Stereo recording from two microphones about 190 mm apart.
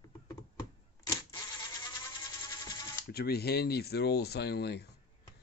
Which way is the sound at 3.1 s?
55° left (ahead or behind).